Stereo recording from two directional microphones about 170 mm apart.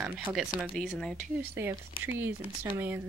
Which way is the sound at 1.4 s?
15° right (ahead or behind).